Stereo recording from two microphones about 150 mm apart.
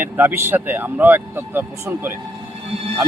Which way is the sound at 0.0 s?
15° right (ahead or behind).